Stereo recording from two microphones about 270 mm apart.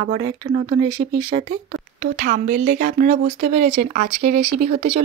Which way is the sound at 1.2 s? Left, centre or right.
Centre.